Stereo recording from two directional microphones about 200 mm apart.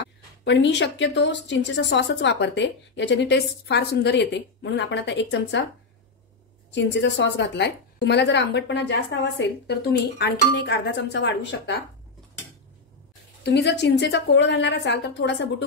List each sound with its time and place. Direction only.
0.0 s a woman's voice: 60° left (ahead or behind)
6.7 s a woman's voice: 65° left (ahead or behind)
13.4 s a woman's voice: 60° left (ahead or behind)